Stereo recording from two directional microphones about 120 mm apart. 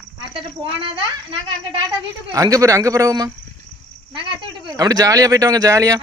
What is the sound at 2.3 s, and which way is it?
Speech, 30° right (ahead or behind).